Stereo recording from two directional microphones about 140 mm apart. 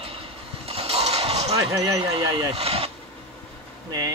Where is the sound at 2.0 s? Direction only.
45° right (ahead or behind).